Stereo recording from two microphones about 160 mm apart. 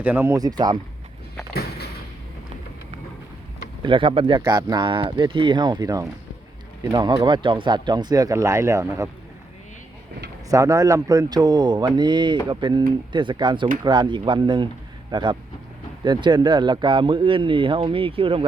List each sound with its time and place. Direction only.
0.0 s speech: 15° right (ahead or behind)
3.8 s speech: 30° right (ahead or behind)
10.5 s speech: 20° right (ahead or behind); by 18.4 s 35° right (ahead or behind)